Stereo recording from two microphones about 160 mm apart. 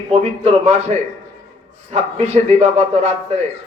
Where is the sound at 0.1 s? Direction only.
45° right (ahead or behind).